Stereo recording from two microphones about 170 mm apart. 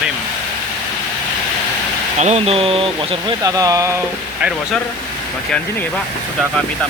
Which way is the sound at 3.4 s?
20° right (ahead or behind).